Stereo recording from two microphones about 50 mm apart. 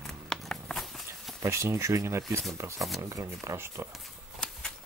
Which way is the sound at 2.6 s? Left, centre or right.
Right.